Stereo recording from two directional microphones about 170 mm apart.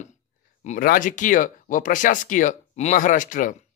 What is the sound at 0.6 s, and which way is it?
Speech, 55° left (ahead or behind).